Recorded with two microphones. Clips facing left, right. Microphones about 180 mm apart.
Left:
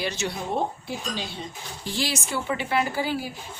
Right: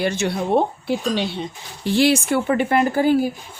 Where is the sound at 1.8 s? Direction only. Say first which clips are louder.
Right 13 dB; 60° right (ahead or behind).